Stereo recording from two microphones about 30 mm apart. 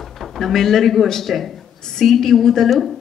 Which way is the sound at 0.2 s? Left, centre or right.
Centre.